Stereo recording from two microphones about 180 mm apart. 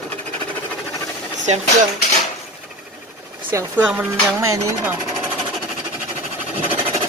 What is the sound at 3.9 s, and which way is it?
Music, 10° right (ahead or behind).